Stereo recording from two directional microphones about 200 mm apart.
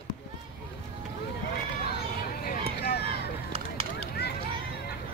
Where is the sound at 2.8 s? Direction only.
55° left (ahead or behind).